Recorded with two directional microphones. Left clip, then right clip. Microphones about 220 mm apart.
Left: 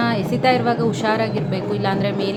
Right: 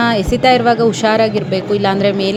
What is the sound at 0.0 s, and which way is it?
A woman's voice, 25° right (ahead or behind).